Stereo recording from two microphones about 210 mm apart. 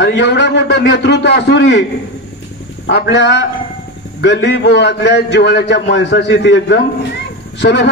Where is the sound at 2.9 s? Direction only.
55° left (ahead or behind).